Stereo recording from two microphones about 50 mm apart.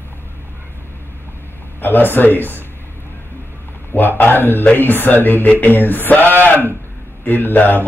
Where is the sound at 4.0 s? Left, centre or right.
Left.